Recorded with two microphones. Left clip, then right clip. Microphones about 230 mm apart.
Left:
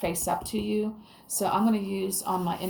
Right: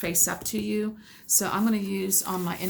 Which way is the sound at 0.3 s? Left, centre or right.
Right.